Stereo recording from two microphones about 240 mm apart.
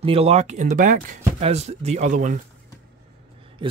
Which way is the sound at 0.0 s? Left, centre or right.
Right.